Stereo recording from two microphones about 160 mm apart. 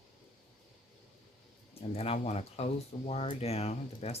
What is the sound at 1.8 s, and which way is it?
Speech, 40° left (ahead or behind).